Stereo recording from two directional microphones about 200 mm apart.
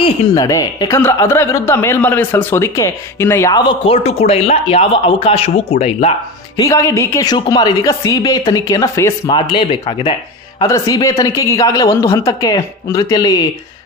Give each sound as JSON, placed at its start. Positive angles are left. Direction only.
{"t": 0.0, "sound": "speech", "side_deg": 20}
{"t": 6.6, "sound": "speech", "side_deg": 15}